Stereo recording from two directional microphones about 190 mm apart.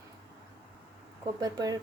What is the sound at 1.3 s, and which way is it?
Speech, 20° right (ahead or behind).